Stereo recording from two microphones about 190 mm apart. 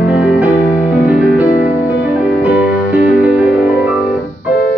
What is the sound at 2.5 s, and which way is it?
Music, 50° left (ahead or behind).